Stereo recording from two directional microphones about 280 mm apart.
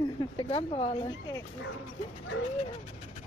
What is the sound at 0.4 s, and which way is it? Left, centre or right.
Speech, centre.